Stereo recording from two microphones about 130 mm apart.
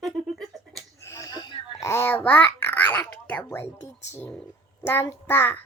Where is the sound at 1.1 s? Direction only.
30° left (ahead or behind).